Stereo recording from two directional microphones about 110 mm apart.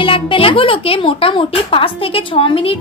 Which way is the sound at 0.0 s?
50° left (ahead or behind).